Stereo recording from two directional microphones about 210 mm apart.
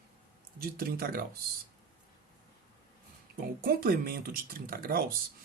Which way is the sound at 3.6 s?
45° right (ahead or behind).